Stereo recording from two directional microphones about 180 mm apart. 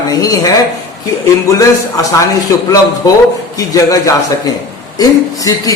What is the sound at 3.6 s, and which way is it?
A man's voice, 20° left (ahead or behind).